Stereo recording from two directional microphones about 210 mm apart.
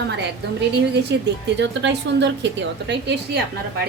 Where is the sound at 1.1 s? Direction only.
55° right (ahead or behind).